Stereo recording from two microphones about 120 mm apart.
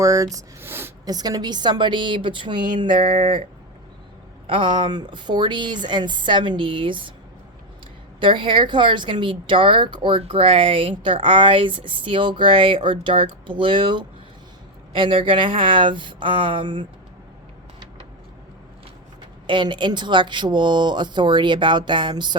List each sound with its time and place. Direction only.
0.0 s speech: 30° right (ahead or behind)
1.0 s speech: 30° right (ahead or behind)
4.4 s speech: 45° right (ahead or behind)
8.2 s speech: 45° right (ahead or behind)
19.5 s speech: 40° right (ahead or behind)